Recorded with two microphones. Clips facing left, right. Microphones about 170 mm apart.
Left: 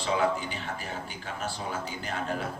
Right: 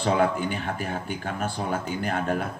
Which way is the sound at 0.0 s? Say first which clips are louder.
Right 4 dB; 55° right (ahead or behind).